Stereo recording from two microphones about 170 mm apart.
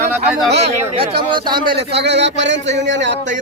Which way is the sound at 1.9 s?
85° right.